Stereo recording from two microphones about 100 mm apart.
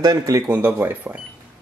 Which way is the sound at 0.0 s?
35° right (ahead or behind).